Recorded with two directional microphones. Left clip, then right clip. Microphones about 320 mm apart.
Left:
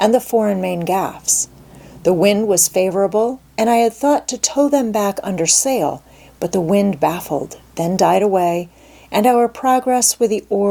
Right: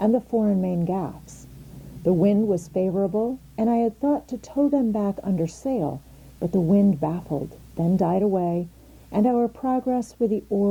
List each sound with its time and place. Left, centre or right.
0.0 s speech: centre
3.5 s speech: centre
10.2 s speech: left